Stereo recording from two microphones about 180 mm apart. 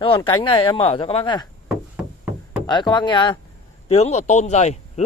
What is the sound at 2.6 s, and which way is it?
Speech, 25° left (ahead or behind).